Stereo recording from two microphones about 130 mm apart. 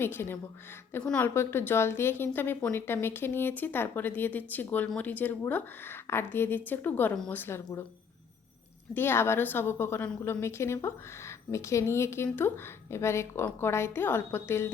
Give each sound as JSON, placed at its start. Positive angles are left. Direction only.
{"t": 0.0, "sound": "speech", "side_deg": 15}
{"t": 9.0, "sound": "a woman's voice", "side_deg": 20}